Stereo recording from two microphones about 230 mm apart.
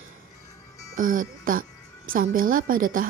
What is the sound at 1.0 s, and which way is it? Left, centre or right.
A woman's voice, right.